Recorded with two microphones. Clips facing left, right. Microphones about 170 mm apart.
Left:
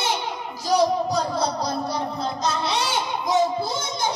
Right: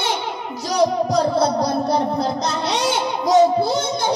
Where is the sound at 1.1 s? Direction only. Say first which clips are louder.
Right 6 dB; 60° right (ahead or behind).